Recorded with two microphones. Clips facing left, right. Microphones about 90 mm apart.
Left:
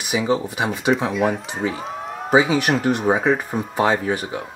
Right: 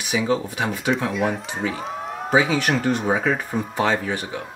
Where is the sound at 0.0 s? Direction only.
5° left (ahead or behind).